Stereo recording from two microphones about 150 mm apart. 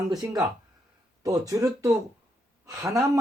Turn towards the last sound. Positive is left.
turn(degrees=-20)  # may be behind; listen again after turning